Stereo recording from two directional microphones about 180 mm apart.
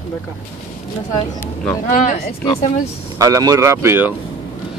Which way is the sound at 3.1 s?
20° right (ahead or behind).